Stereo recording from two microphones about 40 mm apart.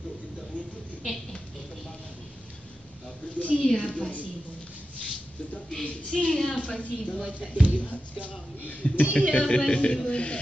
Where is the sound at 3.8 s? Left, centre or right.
Left.